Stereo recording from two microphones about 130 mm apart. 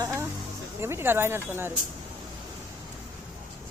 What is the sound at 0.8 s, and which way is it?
Speech, 20° right (ahead or behind).